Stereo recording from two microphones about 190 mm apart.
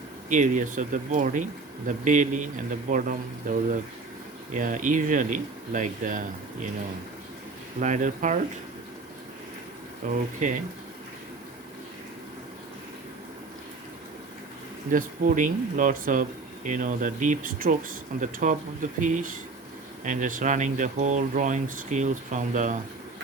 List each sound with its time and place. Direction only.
0.3 s speech: 40° right (ahead or behind)
7.8 s speech: 40° right (ahead or behind)
10.1 s speech: 40° right (ahead or behind)
14.9 s speech: 45° right (ahead or behind)